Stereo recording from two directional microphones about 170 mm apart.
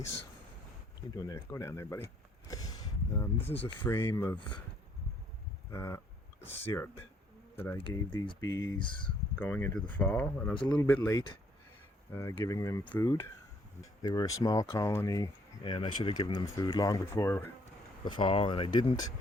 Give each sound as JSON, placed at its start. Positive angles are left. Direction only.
{"t": 1.1, "sound": "speech", "side_deg": 20}
{"t": 2.5, "sound": "a sound", "side_deg": 20}
{"t": 3.8, "sound": "speech", "side_deg": 15}
{"t": 5.7, "sound": "speech", "side_deg": 15}
{"t": 7.8, "sound": "speech", "side_deg": 30}
{"t": 9.4, "sound": "speech", "side_deg": 10}
{"t": 10.5, "sound": "speech", "side_deg": 30}
{"t": 10.8, "sound": "speech", "side_deg": 10}
{"t": 14.0, "sound": "speech", "side_deg": 25}
{"t": 18.0, "sound": "speech", "side_deg": 30}